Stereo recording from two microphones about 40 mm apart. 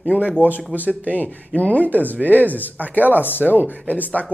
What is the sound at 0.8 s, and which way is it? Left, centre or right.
Speech, left.